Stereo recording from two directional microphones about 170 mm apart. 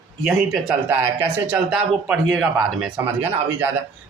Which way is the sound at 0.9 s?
10° right (ahead or behind).